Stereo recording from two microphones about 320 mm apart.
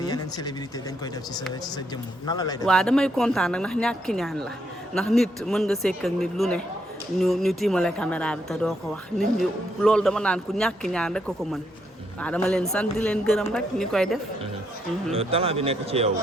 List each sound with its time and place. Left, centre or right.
0.0 s speech: centre
2.2 s a man's voice: centre
15.1 s speech: centre